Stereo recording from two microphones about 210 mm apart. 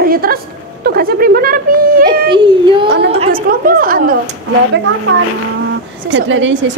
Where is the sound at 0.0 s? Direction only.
45° right (ahead or behind).